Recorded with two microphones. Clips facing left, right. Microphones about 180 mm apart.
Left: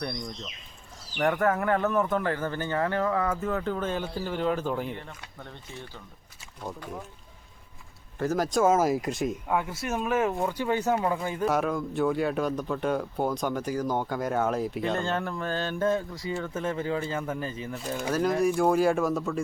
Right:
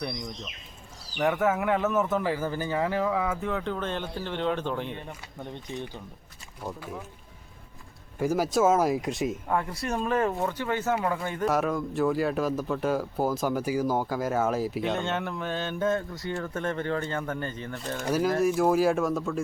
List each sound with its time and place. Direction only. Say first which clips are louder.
0.0 s speech: even; 5° right (ahead or behind)
5.4 s speech: right 8 dB; 15° right (ahead or behind)
6.6 s speech: right 1 dB; 5° right (ahead or behind)
8.2 s speech: right 1 dB; 10° right (ahead or behind); by 11.4 s 10° left (ahead or behind)
11.4 s speech: right 1 dB; centre (ahead or behind)